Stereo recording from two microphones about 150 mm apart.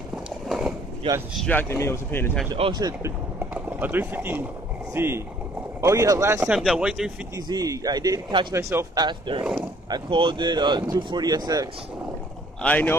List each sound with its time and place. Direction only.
0.5 s a sound: 5° right (ahead or behind)
1.0 s speech: 35° right (ahead or behind)
1.4 s speech: 10° left (ahead or behind)
2.5 s speech: 35° right (ahead or behind)
3.5 s speech: 10° right (ahead or behind)
6.5 s speech: 5° right (ahead or behind)
7.3 s speech: 25° right (ahead or behind)
8.5 s speech: 20° right (ahead or behind)
9.4 s speech: 5° right (ahead or behind)
9.8 s speech: 30° right (ahead or behind)
12.6 s speech: 10° left (ahead or behind)